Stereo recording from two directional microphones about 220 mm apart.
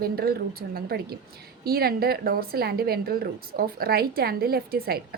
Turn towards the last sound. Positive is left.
turn(degrees=-45)  # may be behind; listen again after turning